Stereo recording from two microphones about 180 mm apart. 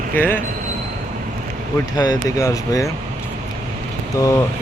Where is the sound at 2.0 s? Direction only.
20° left (ahead or behind).